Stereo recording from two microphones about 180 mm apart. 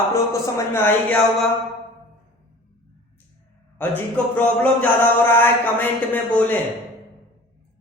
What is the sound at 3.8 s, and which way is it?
A man's voice, 10° left (ahead or behind).